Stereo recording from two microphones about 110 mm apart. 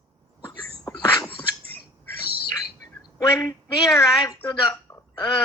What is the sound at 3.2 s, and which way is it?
Speech, 25° left (ahead or behind).